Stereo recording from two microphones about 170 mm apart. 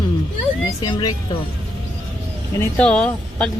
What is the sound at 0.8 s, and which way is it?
Speech, 25° left (ahead or behind).